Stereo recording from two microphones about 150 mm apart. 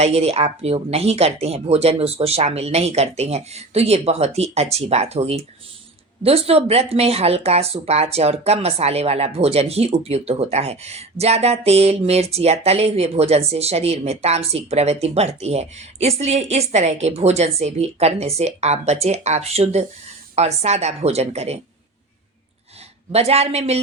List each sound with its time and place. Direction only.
0.0 s speech: 45° right (ahead or behind)
23.1 s speech: 45° right (ahead or behind)